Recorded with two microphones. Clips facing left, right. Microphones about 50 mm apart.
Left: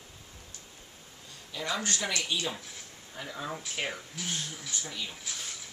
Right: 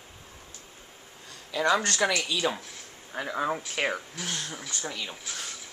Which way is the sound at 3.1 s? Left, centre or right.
Right.